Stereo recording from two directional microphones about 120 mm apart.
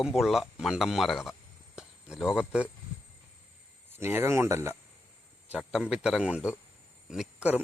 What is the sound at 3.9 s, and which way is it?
Speech, 20° right (ahead or behind).